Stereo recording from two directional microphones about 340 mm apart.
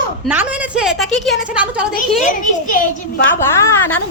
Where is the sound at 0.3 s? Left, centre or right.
Centre.